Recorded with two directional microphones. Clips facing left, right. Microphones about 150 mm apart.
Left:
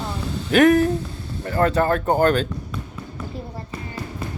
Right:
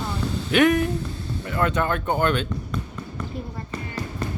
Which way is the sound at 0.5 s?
35° left (ahead or behind).